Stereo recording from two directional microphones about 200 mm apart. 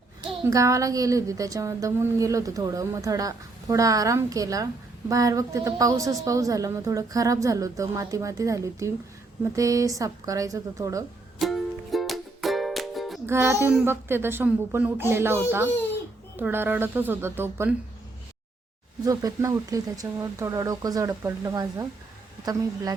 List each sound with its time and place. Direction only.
0.2 s a woman's voice: 15° right (ahead or behind)
11.3 s music: centre (ahead or behind)
13.2 s a woman's voice: 15° right (ahead or behind)
16.4 s a woman's voice: 10° right (ahead or behind)
19.0 s a woman's voice: 15° right (ahead or behind)